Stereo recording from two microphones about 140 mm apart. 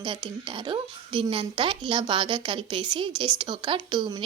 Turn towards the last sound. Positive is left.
turn(degrees=-30)  # may be behind; listen again after turning